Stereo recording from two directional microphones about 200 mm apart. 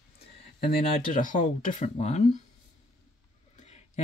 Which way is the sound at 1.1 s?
40° left (ahead or behind).